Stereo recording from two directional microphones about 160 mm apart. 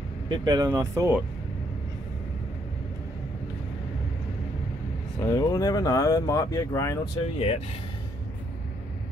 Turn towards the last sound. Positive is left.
turn(degrees=40)  # may be behind; listen again after turning